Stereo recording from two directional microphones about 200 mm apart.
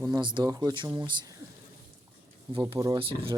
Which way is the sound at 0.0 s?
20° right (ahead or behind).